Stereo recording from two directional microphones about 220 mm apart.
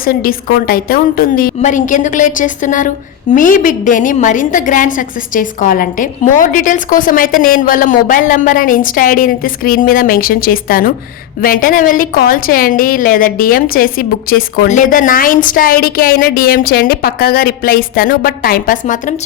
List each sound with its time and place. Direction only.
0.0 s a woman's voice: 40° left (ahead or behind)